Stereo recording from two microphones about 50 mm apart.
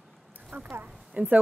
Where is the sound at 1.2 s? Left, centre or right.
Right.